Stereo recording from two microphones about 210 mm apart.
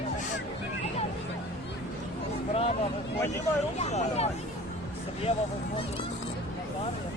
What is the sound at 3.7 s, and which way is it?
Speech, 30° left (ahead or behind).